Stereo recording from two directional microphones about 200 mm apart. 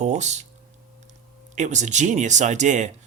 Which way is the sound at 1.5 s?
35° right (ahead or behind).